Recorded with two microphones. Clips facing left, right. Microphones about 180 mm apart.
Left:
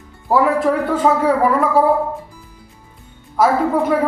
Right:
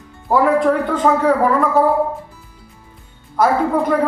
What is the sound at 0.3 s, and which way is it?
A woman's voice, 5° left (ahead or behind).